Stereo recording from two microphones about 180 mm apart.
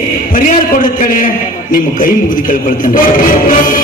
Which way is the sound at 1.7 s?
50° left (ahead or behind).